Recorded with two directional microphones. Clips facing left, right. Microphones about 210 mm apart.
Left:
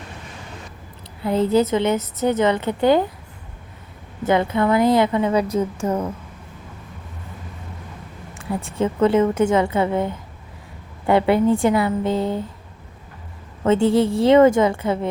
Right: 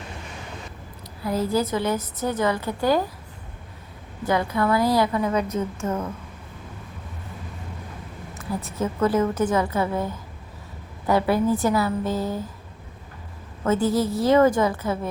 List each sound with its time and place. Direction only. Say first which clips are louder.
1.2 s a woman's voice: left 6 dB; 25° left (ahead or behind)
4.3 s a woman's voice: left 4 dB; 25° left (ahead or behind)
8.4 s a woman's voice: left 4 dB; 30° left (ahead or behind)
13.7 s a woman's voice: left 5 dB; 25° left (ahead or behind)